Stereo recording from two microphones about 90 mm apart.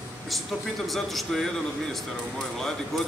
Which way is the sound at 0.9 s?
Centre (ahead or behind).